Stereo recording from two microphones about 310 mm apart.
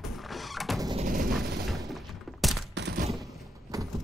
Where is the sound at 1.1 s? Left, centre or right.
Right.